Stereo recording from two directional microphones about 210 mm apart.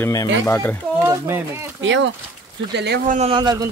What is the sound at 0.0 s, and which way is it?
Speech, 15° left (ahead or behind).